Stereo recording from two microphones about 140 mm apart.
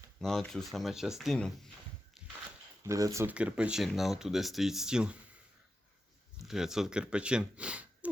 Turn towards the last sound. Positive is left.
turn(degrees=-10)  # may be behind; listen again after turning